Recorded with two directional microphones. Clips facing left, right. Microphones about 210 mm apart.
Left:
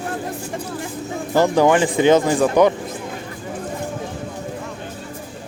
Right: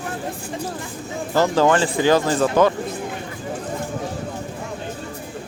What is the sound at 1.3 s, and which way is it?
Speech, 15° left (ahead or behind).